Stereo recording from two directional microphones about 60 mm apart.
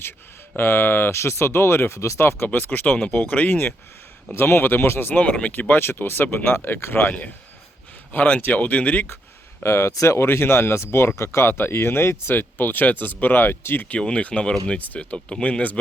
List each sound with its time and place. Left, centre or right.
0.5 s speech: left
4.4 s speech: left
5.2 s speech: left
8.1 s speech: left
9.6 s speech: left
9.9 s speech: left
10.2 s speech: left
13.8 s speech: centre